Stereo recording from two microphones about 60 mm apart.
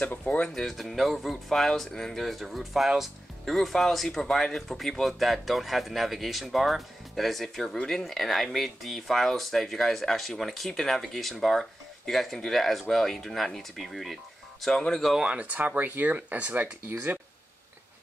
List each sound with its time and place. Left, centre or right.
0.0 s speech: left
0.6 s speech: centre
15.2 s speech: right
16.8 s speech: right